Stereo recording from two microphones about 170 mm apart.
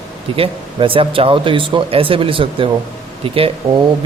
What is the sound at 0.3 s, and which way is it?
A man's voice, 30° right (ahead or behind).